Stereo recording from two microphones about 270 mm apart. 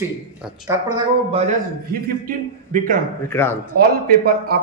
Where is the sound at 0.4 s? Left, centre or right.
Centre.